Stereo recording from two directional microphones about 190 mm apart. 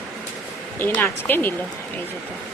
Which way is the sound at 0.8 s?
10° left (ahead or behind).